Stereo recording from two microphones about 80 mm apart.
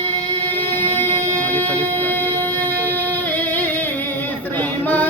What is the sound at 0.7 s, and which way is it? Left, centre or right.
Music, left.